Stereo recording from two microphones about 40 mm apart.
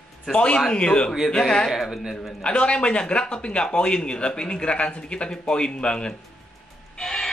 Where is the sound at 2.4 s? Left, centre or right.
Left.